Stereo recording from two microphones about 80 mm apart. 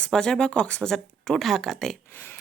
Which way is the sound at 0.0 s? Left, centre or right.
Centre.